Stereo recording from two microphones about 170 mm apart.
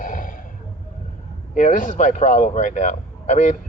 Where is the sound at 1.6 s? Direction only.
50° left (ahead or behind).